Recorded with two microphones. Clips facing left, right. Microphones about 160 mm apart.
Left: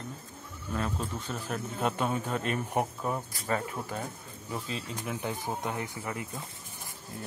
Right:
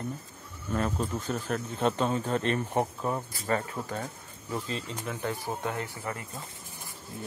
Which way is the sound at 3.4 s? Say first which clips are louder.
Right 2 dB; 10° left (ahead or behind).